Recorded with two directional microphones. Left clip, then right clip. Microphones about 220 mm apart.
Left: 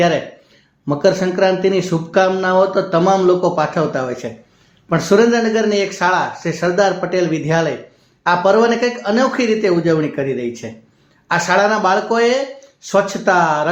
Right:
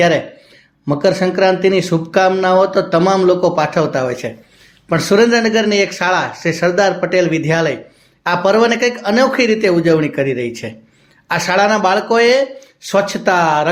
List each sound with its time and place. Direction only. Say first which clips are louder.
0.9 s speech: right 1 dB; 30° right (ahead or behind)